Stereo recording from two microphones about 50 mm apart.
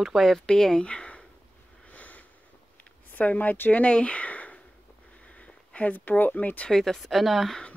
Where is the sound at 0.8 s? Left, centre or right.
Left.